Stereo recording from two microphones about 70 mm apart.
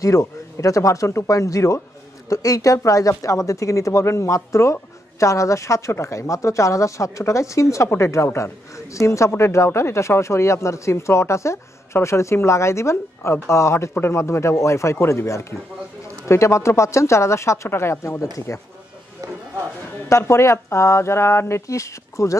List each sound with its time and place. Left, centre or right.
0.0 s speech: left
20.1 s speech: left